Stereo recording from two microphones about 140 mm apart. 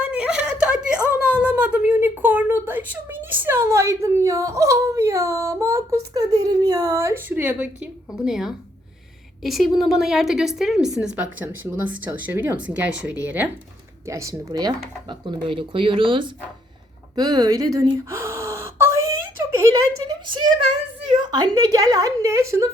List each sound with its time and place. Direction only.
0.0 s a sound: 5° right (ahead or behind)
9.4 s a woman's voice: centre (ahead or behind)
14.1 s speech: 20° right (ahead or behind)
17.2 s gasp: 30° right (ahead or behind)
21.1 s speech: 30° right (ahead or behind)